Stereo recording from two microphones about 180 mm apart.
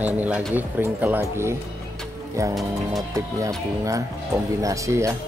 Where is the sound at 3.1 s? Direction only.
20° right (ahead or behind).